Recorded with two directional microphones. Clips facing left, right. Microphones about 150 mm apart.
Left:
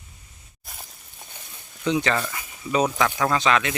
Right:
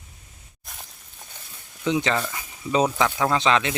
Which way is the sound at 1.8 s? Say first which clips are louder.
Even; 20° right (ahead or behind).